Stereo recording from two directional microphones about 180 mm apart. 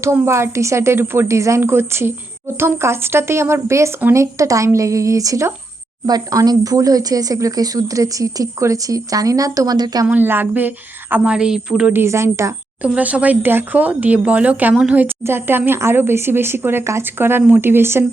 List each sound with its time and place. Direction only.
0.0 s speech: 15° right (ahead or behind)
10.1 s speech: 10° right (ahead or behind)